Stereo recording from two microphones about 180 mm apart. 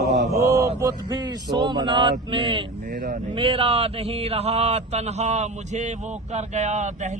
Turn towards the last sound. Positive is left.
turn(degrees=-40)  # may be behind; listen again after turning